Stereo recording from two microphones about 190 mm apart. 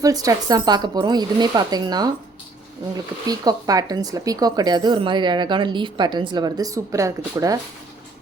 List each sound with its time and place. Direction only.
0.0 s speech: 20° right (ahead or behind)
3.2 s speech: 20° right (ahead or behind)